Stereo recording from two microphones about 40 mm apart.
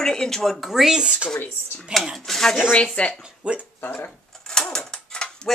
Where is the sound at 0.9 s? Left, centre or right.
Centre.